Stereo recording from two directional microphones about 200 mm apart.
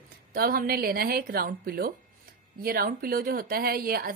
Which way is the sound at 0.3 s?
45° right (ahead or behind).